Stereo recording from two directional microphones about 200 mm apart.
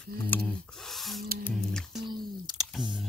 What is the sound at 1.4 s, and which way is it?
Music, 5° left (ahead or behind).